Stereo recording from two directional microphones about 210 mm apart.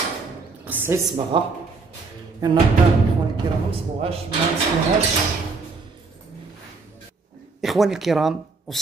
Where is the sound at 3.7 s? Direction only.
25° right (ahead or behind).